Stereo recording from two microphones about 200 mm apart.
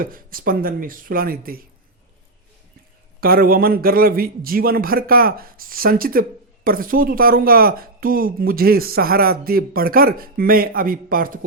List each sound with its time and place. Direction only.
0.0 s speech: 45° right (ahead or behind)
3.2 s speech: 50° right (ahead or behind)